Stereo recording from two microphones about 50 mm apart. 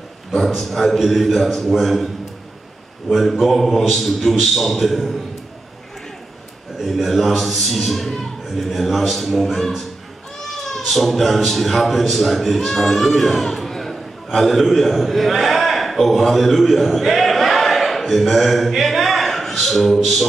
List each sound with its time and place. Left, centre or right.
0.6 s a man's voice: centre
3.1 s a man's voice: centre
6.8 s a man's voice: centre
10.4 s a sound: centre
10.8 s a man's voice: centre